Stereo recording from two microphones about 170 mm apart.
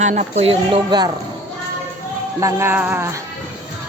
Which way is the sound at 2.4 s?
15° right (ahead or behind).